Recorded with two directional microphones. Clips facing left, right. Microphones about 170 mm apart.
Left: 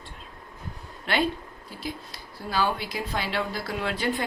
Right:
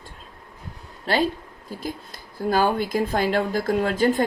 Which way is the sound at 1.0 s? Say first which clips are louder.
Right 4 dB; 40° right (ahead or behind).